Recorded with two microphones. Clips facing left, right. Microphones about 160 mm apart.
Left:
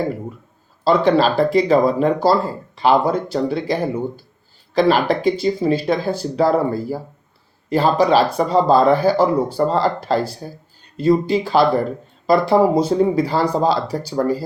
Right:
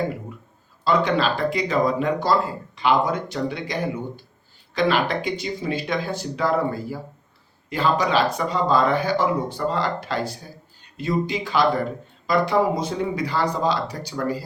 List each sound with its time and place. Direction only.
0.9 s speech: 35° left (ahead or behind)